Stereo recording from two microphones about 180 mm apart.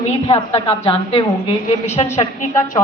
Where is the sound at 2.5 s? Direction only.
15° left (ahead or behind).